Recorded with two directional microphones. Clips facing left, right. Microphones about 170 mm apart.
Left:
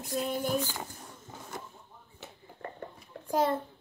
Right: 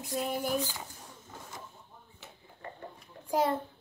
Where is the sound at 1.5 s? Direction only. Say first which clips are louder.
Left 7 dB; 55° left (ahead or behind).